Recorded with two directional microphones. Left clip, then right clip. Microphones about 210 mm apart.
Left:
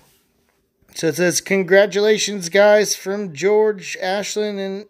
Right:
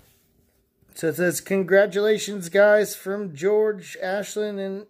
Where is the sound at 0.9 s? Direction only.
5° left (ahead or behind).